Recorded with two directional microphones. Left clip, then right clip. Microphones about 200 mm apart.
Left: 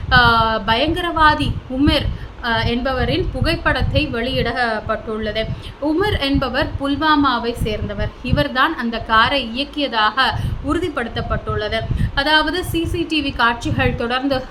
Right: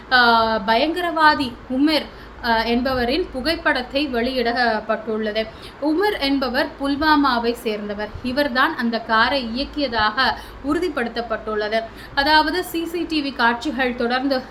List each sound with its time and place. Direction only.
0.1 s a woman's voice: 5° left (ahead or behind)